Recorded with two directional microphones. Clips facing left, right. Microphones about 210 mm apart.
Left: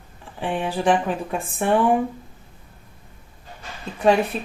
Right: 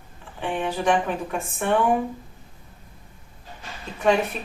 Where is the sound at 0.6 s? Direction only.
30° left (ahead or behind).